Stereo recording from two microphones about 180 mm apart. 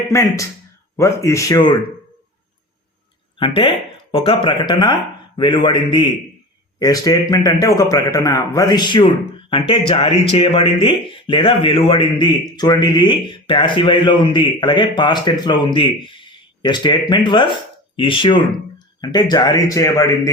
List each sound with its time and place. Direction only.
0.1 s speech: 15° left (ahead or behind)
3.3 s speech: 25° left (ahead or behind)